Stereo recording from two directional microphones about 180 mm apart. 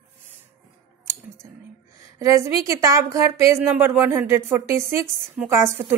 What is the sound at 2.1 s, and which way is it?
Speech, 15° right (ahead or behind).